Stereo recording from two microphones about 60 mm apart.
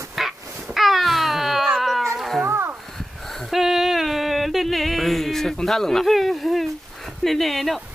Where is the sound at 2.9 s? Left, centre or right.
Centre.